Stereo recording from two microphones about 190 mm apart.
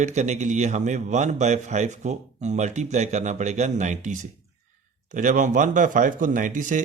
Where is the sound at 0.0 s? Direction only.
40° right (ahead or behind).